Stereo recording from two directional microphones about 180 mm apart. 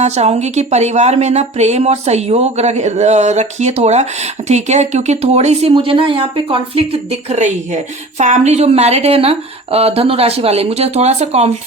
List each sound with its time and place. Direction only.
0.0 s speech: 35° right (ahead or behind)